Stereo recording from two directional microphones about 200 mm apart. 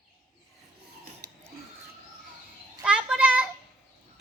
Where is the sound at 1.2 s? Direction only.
55° right (ahead or behind).